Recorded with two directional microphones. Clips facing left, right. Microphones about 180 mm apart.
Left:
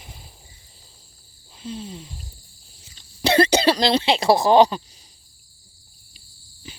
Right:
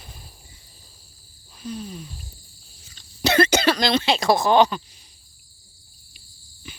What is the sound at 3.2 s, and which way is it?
Speech, 30° left (ahead or behind).